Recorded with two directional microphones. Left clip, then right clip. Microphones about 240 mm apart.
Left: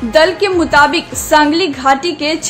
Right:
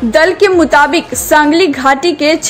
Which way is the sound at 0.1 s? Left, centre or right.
Right.